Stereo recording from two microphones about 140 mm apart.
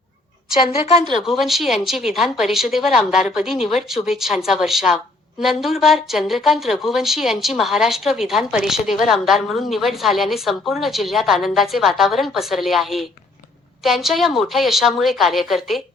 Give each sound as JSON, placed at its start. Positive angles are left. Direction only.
{"t": 0.6, "sound": "a woman's voice", "side_deg": 45}
{"t": 1.3, "sound": "a woman's voice", "side_deg": 0}